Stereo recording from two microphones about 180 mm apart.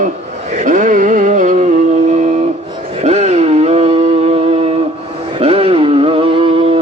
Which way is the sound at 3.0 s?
40° right (ahead or behind).